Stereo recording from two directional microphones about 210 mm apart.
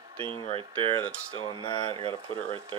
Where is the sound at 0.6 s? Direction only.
25° right (ahead or behind).